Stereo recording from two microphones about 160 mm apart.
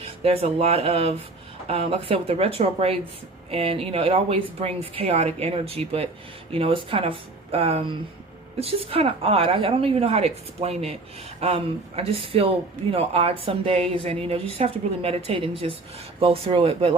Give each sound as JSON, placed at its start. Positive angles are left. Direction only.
{"t": 0.0, "sound": "speech", "side_deg": -40}